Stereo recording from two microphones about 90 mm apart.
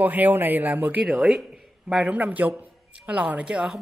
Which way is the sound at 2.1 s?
20° right (ahead or behind).